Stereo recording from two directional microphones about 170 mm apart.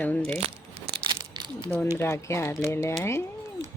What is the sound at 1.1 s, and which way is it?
Crumpling, 25° right (ahead or behind).